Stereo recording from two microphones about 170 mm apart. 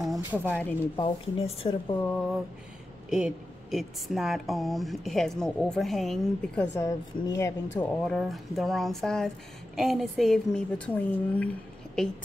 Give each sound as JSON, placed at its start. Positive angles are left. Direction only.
{"t": 0.0, "sound": "speech", "side_deg": -5}
{"t": 0.9, "sound": "speech", "side_deg": 30}
{"t": 2.0, "sound": "a sound", "side_deg": 10}
{"t": 3.1, "sound": "speech", "side_deg": -5}
{"t": 8.0, "sound": "speech", "side_deg": 0}